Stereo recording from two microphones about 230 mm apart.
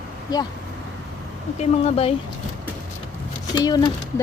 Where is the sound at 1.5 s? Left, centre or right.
Left.